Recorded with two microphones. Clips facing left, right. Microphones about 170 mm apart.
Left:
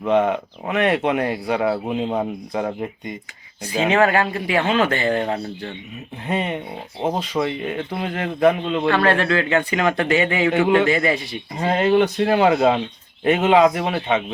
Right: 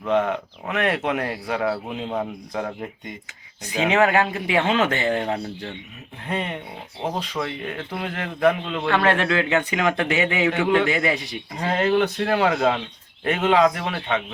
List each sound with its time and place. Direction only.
0.7 s speech: 5° left (ahead or behind)
1.9 s speech: 15° left (ahead or behind)
3.7 s speech: 15° right (ahead or behind)
6.2 s speech: 5° left (ahead or behind)
8.9 s speech: 15° right (ahead or behind)
10.6 s speech: 5° left (ahead or behind)
10.8 s speech: 15° right (ahead or behind)
11.5 s speech: 5° left (ahead or behind)